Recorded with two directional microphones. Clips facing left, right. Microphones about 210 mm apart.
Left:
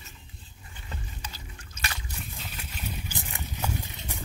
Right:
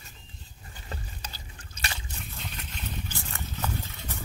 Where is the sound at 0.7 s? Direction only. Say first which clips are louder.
Right 1 dB; 35° right (ahead or behind).